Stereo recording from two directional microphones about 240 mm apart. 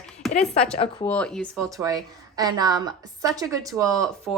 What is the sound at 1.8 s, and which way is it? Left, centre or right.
A woman's voice, centre.